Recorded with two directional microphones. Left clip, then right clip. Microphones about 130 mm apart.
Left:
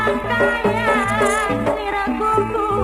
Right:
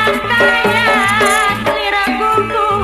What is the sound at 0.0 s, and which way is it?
Music, 20° right (ahead or behind).